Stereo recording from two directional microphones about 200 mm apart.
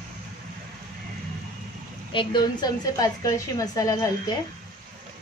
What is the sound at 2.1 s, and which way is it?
A woman's voice, 25° left (ahead or behind).